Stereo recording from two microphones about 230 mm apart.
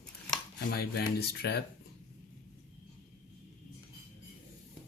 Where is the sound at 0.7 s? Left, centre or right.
Left.